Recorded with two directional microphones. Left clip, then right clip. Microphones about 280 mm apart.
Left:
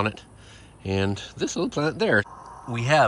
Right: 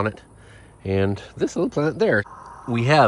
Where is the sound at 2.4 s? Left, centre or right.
Left.